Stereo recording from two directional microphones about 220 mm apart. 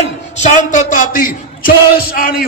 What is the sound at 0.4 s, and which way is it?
A man's voice, 35° left (ahead or behind).